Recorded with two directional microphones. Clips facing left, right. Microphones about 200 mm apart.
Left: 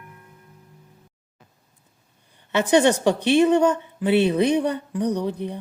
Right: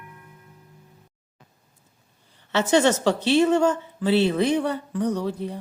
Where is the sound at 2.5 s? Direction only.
15° left (ahead or behind).